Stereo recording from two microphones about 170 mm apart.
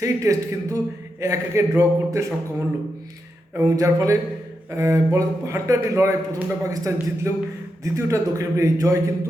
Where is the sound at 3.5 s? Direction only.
15° right (ahead or behind).